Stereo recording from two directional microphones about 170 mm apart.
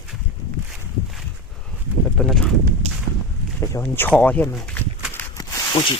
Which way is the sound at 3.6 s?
15° left (ahead or behind).